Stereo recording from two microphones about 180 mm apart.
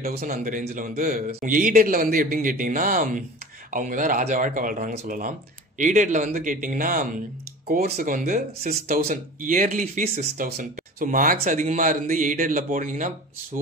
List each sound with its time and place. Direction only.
0.0 s speech: 50° right (ahead or behind)